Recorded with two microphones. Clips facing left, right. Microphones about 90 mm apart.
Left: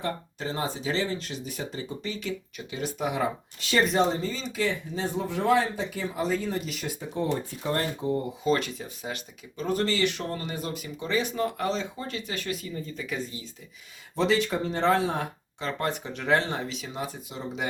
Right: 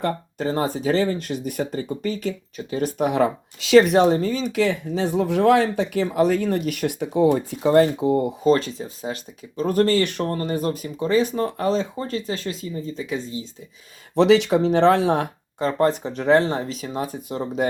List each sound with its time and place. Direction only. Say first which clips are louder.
0.0 s speech: right 8 dB; 45° right (ahead or behind); by 7.2 s 70° right (ahead or behind)
7.6 s speech: right 15 dB; 90° right
8.4 s speech: right 6 dB; 35° right (ahead or behind)
14.2 s speech: right 9 dB; 75° right (ahead or behind)
15.6 s speech: right 10 dB; 35° right (ahead or behind)